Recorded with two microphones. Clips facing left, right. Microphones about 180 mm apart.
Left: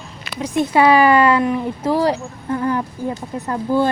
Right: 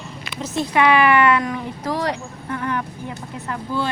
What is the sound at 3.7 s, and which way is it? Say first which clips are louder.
Speech: left 8 dB; 45° left (ahead or behind).